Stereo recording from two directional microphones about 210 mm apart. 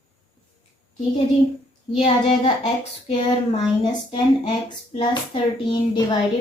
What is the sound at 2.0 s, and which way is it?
Child singing, 25° left (ahead or behind).